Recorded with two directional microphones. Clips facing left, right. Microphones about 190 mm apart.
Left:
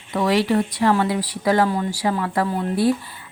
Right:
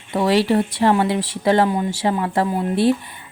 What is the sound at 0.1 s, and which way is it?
Speech, 30° right (ahead or behind).